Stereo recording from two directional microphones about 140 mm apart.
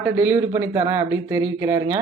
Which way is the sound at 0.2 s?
15° right (ahead or behind).